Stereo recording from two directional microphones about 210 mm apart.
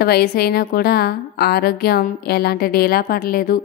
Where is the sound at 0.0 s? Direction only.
45° left (ahead or behind).